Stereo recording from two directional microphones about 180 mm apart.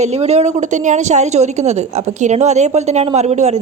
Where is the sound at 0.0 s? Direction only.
35° right (ahead or behind).